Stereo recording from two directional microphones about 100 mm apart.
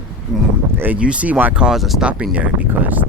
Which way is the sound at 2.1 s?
15° right (ahead or behind).